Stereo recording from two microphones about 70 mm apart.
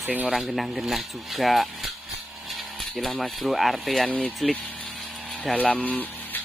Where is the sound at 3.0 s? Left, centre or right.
Centre.